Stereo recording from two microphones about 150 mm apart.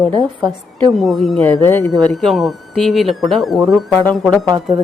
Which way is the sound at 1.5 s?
15° left (ahead or behind).